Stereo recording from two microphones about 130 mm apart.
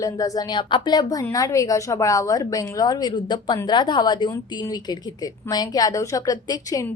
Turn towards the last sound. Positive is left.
turn(degrees=30)  # may be behind; listen again after turning